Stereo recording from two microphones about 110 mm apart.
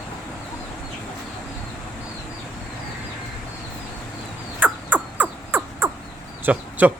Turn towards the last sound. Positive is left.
turn(degrees=-15)  # may be behind; listen again after turning